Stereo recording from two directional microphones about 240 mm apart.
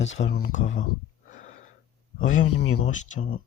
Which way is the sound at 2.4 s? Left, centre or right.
Left.